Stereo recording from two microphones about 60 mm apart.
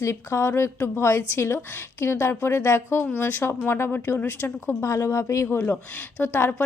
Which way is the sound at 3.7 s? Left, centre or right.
Left.